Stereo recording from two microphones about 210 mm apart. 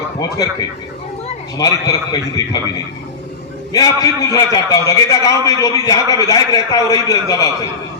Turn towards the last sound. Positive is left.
turn(degrees=15)  # may be behind; listen again after turning